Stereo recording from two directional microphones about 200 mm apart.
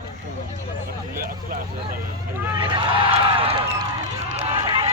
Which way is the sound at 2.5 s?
25° right (ahead or behind).